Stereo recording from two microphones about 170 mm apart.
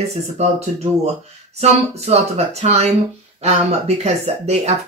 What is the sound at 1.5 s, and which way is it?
Speech, 40° right (ahead or behind).